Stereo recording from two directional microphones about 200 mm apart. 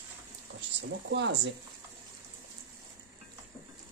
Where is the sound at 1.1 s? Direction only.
60° right (ahead or behind).